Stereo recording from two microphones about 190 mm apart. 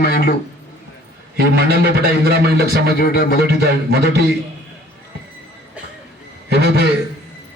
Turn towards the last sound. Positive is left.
turn(degrees=-60)  # may be behind; listen again after turning